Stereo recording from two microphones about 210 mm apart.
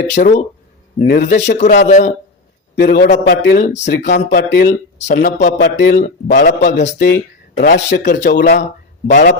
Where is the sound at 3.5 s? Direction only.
35° left (ahead or behind).